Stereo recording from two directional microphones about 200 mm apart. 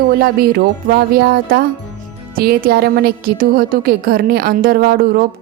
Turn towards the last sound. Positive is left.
turn(degrees=-45)  # may be behind; listen again after turning